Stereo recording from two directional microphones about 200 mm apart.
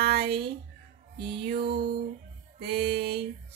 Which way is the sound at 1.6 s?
55° right (ahead or behind).